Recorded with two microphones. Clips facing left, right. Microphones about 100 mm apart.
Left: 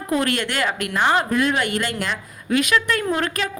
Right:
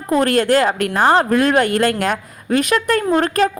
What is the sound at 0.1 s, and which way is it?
A woman's voice, 40° right (ahead or behind).